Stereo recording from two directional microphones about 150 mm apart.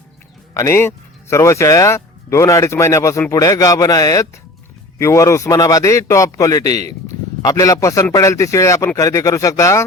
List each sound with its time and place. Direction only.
0.5 s speech: 20° left (ahead or behind)